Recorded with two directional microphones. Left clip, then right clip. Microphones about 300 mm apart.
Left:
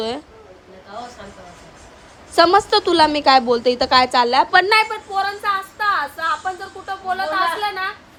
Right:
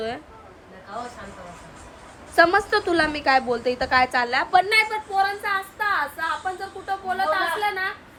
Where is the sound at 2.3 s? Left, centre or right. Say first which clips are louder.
Left 4 dB; centre.